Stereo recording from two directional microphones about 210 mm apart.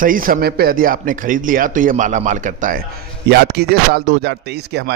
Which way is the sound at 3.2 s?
50° right (ahead or behind).